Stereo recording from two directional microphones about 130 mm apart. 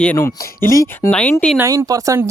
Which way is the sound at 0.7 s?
25° left (ahead or behind).